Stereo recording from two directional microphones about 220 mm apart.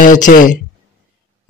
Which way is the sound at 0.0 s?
35° left (ahead or behind).